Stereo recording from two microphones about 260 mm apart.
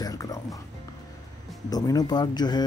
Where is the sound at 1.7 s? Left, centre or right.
Centre.